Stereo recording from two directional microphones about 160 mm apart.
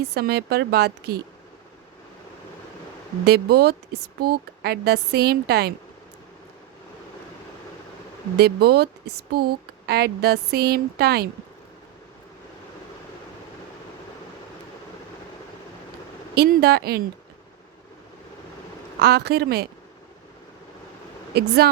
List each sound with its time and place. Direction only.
0.1 s speech: 80° right
3.2 s speech: 80° right
8.4 s speech: 75° right (ahead or behind)
16.3 s speech: 80° right
18.9 s speech: 90° right
21.3 s speech: 80° right